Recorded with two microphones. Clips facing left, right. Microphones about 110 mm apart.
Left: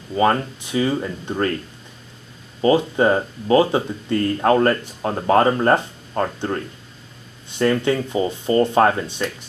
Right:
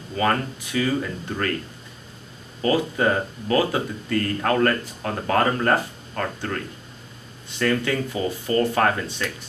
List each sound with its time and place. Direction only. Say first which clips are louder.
0.1 s speech: left 5 dB; 25° left (ahead or behind)
2.6 s speech: left 5 dB; 25° left (ahead or behind)